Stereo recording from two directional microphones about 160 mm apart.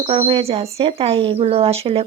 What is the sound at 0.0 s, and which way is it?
Speech, 40° right (ahead or behind).